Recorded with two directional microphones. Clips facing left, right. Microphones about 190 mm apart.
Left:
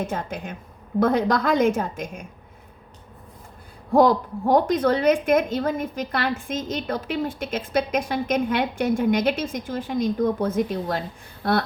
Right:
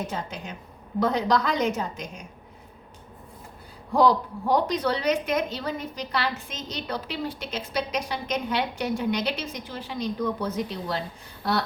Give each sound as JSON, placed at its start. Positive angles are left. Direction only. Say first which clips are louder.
{"t": 0.1, "sound": "a woman's voice", "louder": "left 4 dB", "side_deg": 50}
{"t": 3.9, "sound": "a woman's voice", "louder": "left 4 dB", "side_deg": 50}